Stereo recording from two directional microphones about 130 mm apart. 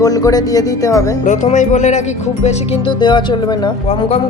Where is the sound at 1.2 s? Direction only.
70° left (ahead or behind).